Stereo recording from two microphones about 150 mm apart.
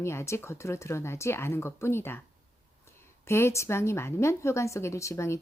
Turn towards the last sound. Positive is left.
turn(degrees=20)  # may be behind; listen again after turning